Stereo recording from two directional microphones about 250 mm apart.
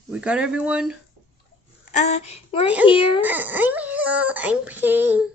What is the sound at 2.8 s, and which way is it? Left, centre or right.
Speech, centre.